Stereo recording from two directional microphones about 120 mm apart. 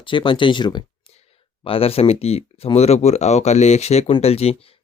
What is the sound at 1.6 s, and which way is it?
Speech, 50° left (ahead or behind).